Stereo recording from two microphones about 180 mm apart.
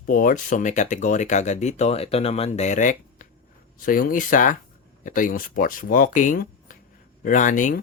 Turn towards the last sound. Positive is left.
turn(degrees=45)  # may be behind; listen again after turning